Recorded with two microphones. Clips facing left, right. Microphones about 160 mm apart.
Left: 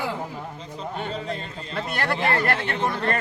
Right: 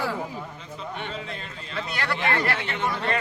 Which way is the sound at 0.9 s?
40° left (ahead or behind).